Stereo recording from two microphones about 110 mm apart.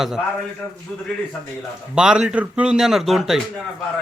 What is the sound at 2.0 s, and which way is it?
Speech, 5° right (ahead or behind).